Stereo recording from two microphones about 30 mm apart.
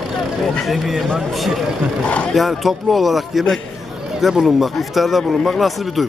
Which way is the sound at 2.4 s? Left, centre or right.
Centre.